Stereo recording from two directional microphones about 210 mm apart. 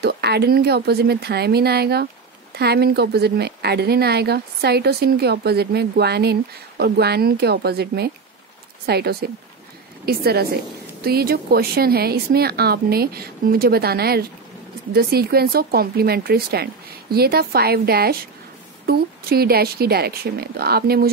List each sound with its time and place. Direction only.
0.0 s speech: 50° right (ahead or behind)